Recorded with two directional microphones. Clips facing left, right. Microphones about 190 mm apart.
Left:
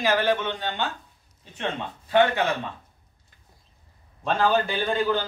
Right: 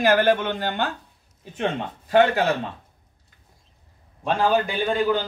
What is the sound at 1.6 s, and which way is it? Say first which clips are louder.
Speech: right 4 dB; 45° right (ahead or behind).